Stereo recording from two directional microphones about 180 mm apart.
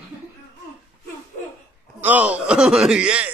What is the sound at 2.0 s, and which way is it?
Speech, 10° right (ahead or behind).